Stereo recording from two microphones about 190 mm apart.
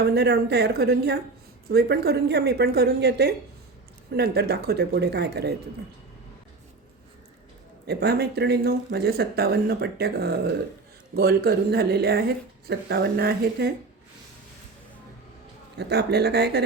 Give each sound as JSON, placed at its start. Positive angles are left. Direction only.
{"t": 0.1, "sound": "speech", "side_deg": -60}
{"t": 7.9, "sound": "speech", "side_deg": -55}
{"t": 15.8, "sound": "speech", "side_deg": -60}